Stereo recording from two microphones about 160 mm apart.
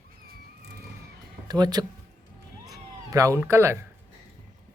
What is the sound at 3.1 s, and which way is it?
Speech, 20° right (ahead or behind).